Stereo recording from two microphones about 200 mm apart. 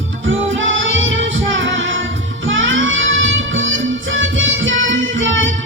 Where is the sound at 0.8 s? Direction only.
70° right (ahead or behind).